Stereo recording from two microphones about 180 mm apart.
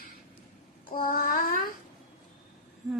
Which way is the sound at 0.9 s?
50° left (ahead or behind).